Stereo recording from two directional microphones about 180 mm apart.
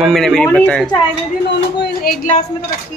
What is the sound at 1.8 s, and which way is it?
Speech, 55° left (ahead or behind).